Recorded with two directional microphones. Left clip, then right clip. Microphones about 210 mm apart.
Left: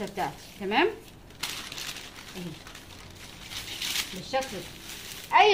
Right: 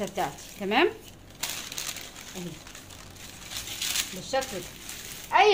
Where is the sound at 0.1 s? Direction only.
40° right (ahead or behind).